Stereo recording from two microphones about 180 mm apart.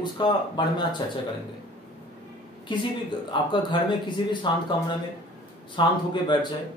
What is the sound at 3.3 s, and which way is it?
Speech, 25° left (ahead or behind).